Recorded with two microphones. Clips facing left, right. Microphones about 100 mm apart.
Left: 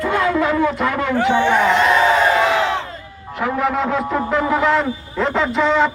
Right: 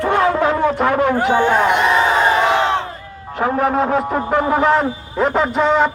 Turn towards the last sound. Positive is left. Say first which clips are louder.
# right 1 dB
turn(degrees=-45)  # may be behind; listen again after turning